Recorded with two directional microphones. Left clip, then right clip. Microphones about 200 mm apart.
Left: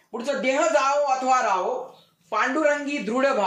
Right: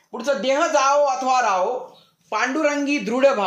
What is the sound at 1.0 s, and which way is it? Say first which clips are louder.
A man's voice: right 2 dB; 50° right (ahead or behind).